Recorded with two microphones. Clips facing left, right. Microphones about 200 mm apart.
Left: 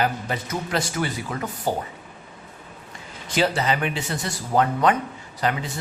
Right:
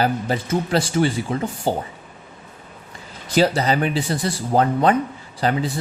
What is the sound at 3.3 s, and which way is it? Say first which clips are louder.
Speech: right 4 dB; 35° right (ahead or behind).